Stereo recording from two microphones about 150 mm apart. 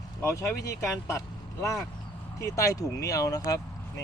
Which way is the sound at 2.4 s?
20° left (ahead or behind).